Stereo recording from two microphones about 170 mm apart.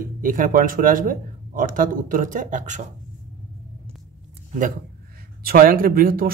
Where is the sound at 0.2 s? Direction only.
50° right (ahead or behind).